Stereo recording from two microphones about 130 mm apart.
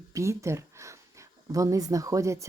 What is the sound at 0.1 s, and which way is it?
A woman's voice, 20° right (ahead or behind).